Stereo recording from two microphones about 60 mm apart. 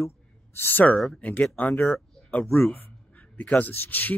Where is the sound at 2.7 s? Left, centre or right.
Left.